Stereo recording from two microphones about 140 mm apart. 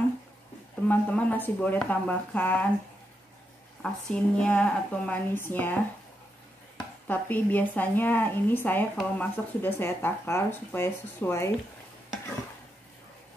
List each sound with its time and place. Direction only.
0.8 s speech: 10° left (ahead or behind)
3.8 s speech: 5° left (ahead or behind)
7.1 s speech: 10° left (ahead or behind)